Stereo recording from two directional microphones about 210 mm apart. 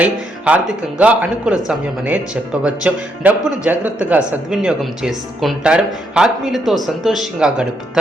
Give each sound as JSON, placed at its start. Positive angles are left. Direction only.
{"t": 0.0, "sound": "speech", "side_deg": -5}